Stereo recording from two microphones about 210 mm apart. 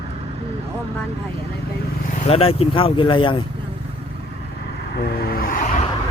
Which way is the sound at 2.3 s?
30° left (ahead or behind).